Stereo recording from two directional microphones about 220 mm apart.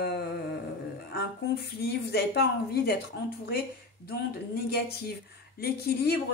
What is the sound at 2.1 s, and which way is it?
Speech, 50° left (ahead or behind).